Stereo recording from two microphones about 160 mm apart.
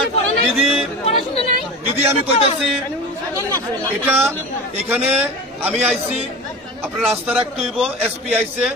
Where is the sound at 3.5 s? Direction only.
15° right (ahead or behind).